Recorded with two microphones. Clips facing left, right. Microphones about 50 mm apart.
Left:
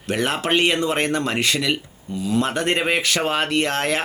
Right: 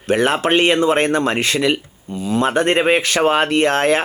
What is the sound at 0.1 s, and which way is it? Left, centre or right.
Speech, centre.